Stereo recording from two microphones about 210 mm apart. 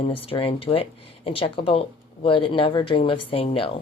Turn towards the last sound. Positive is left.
turn(degrees=25)  # may be behind; listen again after turning